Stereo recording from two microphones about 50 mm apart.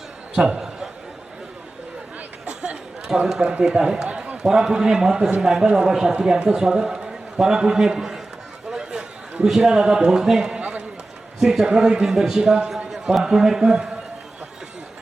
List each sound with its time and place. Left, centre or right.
0.3 s a sound: centre
3.2 s a man's voice: centre
8.7 s chatter: centre
9.5 s a man's voice: centre
10.6 s a sound: right
11.3 s a man's voice: centre